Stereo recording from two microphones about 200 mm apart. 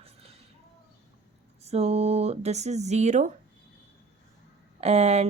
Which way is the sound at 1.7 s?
30° right (ahead or behind).